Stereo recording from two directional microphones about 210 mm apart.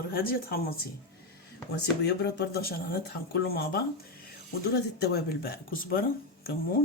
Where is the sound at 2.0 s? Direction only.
50° left (ahead or behind).